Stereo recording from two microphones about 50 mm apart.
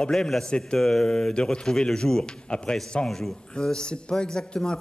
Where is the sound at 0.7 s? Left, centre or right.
Centre.